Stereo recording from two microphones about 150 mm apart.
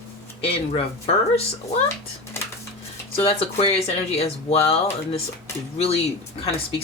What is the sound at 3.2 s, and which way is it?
Speech, 40° left (ahead or behind).